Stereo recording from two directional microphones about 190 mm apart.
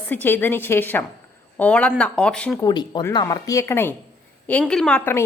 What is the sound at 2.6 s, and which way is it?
A woman's voice, 20° left (ahead or behind).